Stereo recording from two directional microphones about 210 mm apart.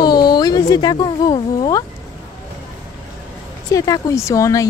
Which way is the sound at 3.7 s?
15° left (ahead or behind).